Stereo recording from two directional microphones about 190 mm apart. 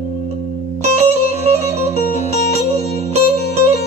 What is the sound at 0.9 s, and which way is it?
Music, 35° right (ahead or behind).